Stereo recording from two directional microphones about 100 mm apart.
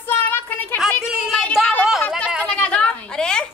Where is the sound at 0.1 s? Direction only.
20° left (ahead or behind).